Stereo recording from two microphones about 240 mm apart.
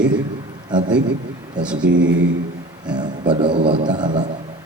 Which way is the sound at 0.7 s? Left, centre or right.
Centre.